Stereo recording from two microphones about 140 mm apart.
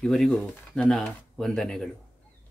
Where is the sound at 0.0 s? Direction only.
5° left (ahead or behind).